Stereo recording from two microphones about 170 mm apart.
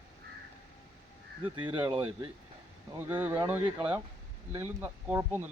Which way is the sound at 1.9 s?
30° right (ahead or behind).